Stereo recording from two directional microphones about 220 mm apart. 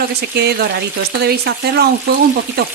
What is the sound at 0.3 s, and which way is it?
Speech, 50° right (ahead or behind).